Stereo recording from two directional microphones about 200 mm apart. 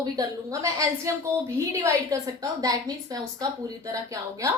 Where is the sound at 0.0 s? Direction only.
15° right (ahead or behind).